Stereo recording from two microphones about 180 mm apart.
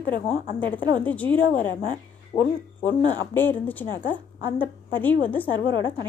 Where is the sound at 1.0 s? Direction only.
10° left (ahead or behind).